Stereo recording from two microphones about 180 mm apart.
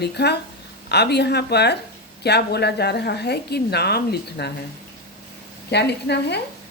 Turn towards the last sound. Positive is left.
turn(degrees=70)  # may be behind; listen again after turning